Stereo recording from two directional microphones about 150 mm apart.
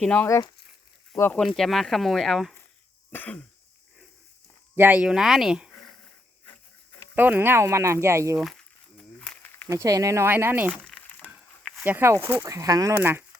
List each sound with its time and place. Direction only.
0.0 s cough: 5° left (ahead or behind)
1.1 s speech: 15° left (ahead or behind)
1.4 s speech: centre (ahead or behind)
3.1 s cough: 10° left (ahead or behind)
4.8 s speech: 10° right (ahead or behind)
7.2 s speech: 15° right (ahead or behind)
8.4 s crumpling: centre (ahead or behind)
9.6 s speech: 25° right (ahead or behind)
10.7 s crumpling: 5° left (ahead or behind)
11.9 s speech: 15° right (ahead or behind)